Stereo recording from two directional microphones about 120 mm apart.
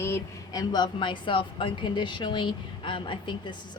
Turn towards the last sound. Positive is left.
turn(degrees=40)  # may be behind; listen again after turning